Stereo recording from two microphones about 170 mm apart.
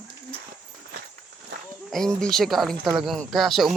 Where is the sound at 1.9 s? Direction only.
5° left (ahead or behind).